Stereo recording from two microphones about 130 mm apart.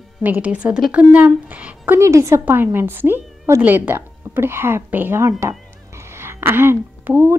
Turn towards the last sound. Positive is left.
turn(degrees=-20)  # may be behind; listen again after turning